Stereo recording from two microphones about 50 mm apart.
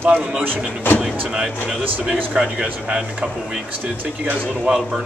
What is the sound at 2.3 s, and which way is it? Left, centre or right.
Speech, right.